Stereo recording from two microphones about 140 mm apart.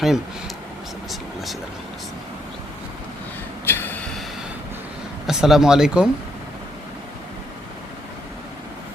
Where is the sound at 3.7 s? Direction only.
15° left (ahead or behind).